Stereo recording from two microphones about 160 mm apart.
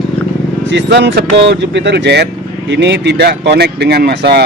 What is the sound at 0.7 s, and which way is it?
Speech, 90° right.